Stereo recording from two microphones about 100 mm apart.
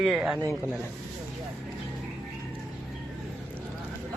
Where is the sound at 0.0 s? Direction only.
Centre (ahead or behind).